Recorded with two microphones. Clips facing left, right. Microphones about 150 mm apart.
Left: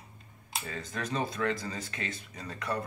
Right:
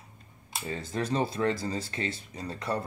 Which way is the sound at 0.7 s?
30° right (ahead or behind).